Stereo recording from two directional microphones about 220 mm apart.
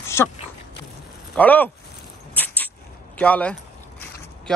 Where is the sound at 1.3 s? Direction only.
5° left (ahead or behind).